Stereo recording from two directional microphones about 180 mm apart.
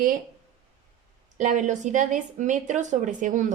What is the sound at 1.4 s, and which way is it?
Speech, 45° right (ahead or behind).